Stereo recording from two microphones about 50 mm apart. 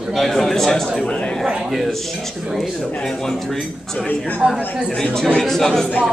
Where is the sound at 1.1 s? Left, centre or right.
Left.